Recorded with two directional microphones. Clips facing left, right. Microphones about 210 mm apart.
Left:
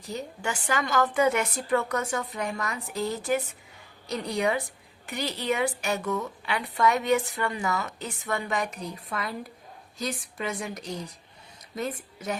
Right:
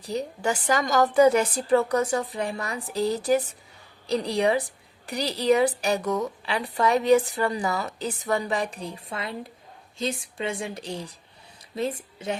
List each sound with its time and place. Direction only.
0.0 s a woman's voice: 35° right (ahead or behind)